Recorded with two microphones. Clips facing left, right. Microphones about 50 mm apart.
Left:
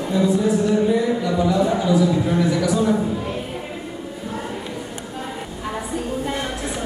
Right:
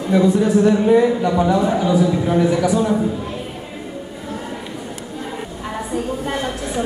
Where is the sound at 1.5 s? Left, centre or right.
Right.